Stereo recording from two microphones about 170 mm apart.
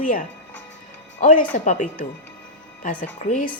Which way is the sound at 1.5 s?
50° left (ahead or behind).